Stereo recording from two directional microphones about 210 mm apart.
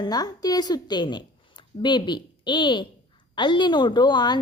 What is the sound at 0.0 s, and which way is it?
A woman's voice, 20° left (ahead or behind).